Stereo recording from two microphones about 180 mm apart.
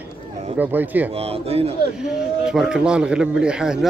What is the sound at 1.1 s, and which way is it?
Speech, 35° right (ahead or behind).